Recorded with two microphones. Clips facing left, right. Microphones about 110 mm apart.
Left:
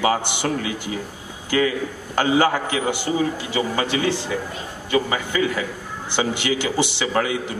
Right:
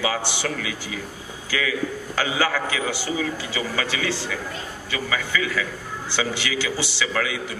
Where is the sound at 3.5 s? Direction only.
45° left (ahead or behind).